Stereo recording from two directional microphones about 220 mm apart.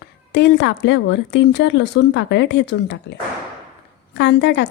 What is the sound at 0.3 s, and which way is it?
Speech, 50° left (ahead or behind).